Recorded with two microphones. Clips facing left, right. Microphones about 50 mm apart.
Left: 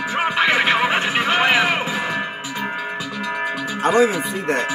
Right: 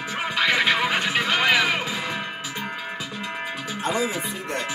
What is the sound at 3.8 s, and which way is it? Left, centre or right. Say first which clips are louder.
Music: left 9 dB; left.